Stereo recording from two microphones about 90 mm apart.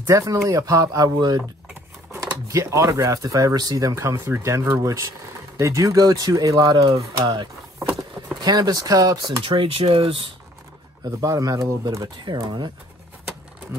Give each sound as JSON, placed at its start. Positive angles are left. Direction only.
{"t": 0.0, "sound": "speech", "side_deg": -35}
{"t": 2.1, "sound": "speech", "side_deg": -35}
{"t": 8.4, "sound": "speech", "side_deg": -50}
{"t": 9.4, "sound": "speech", "side_deg": -90}
{"t": 11.1, "sound": "speech", "side_deg": -40}